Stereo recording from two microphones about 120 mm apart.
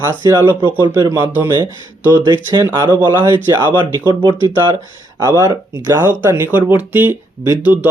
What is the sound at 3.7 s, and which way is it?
Speech, 40° right (ahead or behind).